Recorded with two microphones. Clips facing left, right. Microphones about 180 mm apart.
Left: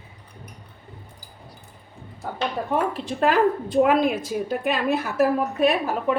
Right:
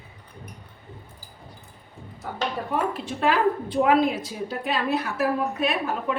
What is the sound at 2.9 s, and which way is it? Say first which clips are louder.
A woman's voice: left 4 dB; 45° left (ahead or behind).